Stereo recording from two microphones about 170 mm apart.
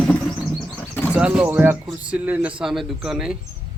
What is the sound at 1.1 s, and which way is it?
A man's voice, 5° right (ahead or behind).